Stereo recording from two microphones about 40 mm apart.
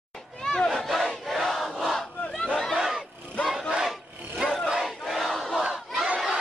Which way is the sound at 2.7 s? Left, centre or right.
Centre.